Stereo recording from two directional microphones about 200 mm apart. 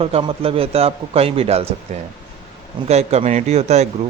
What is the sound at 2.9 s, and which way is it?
Speech, 30° right (ahead or behind).